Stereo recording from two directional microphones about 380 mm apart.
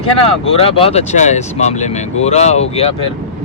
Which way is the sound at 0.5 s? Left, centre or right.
Centre.